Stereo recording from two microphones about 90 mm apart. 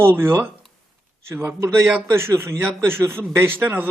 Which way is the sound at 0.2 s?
25° right (ahead or behind).